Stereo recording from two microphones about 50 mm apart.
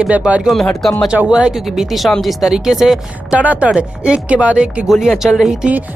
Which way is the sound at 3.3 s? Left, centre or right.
Right.